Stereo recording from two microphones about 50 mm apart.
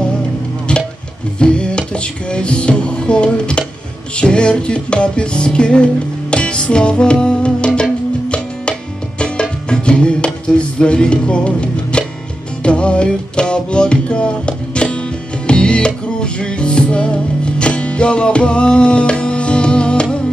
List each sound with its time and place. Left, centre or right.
1.4 s music: centre